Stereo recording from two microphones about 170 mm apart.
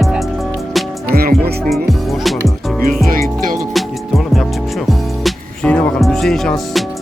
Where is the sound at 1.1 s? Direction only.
65° right (ahead or behind).